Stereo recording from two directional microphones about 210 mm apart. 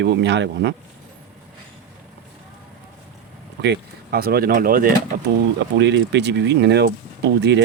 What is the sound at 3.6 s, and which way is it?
Speech, 50° right (ahead or behind).